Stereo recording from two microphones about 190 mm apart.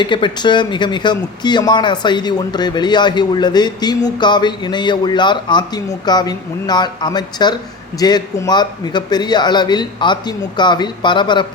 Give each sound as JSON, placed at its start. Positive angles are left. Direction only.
{"t": 0.0, "sound": "speech", "side_deg": 25}